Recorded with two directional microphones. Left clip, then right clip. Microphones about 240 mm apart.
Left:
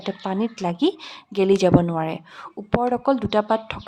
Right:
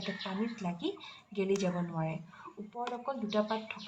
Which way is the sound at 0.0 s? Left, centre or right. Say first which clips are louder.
Left 12 dB; left.